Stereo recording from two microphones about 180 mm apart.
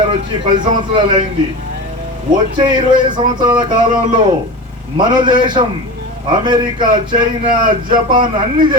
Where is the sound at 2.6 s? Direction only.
25° right (ahead or behind).